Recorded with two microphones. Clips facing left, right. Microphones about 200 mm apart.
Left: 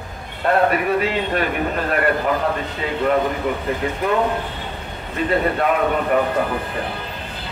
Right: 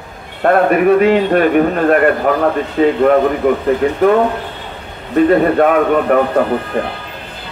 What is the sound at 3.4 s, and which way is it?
Speech, 50° right (ahead or behind).